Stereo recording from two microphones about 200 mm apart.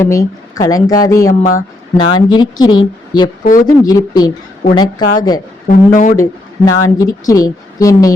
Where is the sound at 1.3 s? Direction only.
40° left (ahead or behind).